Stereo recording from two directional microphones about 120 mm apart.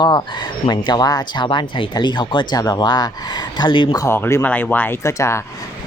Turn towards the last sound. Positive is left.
turn(degrees=25)  # may be behind; listen again after turning